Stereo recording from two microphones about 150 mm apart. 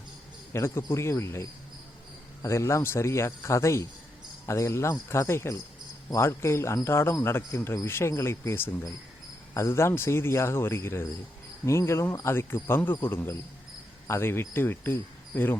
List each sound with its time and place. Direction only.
0.5 s speech: 20° left (ahead or behind)